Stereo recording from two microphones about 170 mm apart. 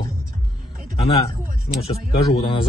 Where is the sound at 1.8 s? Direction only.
30° left (ahead or behind).